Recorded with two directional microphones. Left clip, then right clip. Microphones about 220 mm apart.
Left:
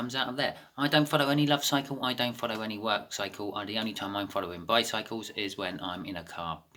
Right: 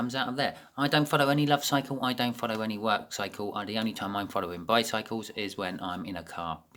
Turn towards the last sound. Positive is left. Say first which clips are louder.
# right 1 dB
turn(degrees=-45)  # may be behind; listen again after turning